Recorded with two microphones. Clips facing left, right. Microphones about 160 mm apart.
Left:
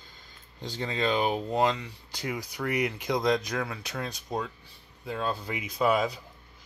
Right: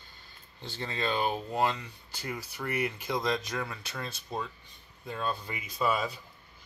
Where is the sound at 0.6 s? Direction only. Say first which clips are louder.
Left 4 dB; 15° left (ahead or behind).